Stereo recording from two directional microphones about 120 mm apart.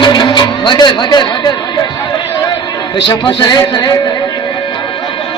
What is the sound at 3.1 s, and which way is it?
Speech, 40° left (ahead or behind).